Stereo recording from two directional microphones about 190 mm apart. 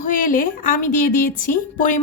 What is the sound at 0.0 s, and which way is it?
A woman's voice, 45° left (ahead or behind).